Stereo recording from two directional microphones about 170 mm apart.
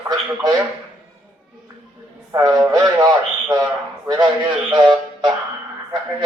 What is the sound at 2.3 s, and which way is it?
A man's voice, 20° right (ahead or behind).